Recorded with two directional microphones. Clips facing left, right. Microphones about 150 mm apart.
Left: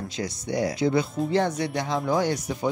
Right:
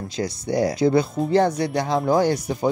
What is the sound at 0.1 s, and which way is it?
Speech, 35° right (ahead or behind).